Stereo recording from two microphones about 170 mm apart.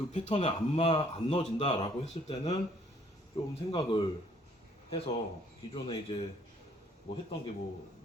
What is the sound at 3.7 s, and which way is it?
Speech, 30° left (ahead or behind).